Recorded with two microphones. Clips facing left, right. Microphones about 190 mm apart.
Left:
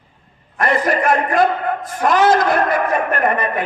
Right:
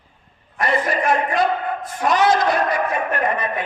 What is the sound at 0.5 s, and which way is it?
A man's voice, 50° left (ahead or behind).